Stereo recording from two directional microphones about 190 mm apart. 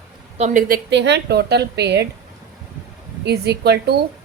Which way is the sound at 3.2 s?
60° right (ahead or behind).